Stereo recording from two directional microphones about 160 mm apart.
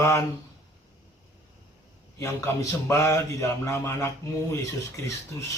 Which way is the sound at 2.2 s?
20° left (ahead or behind).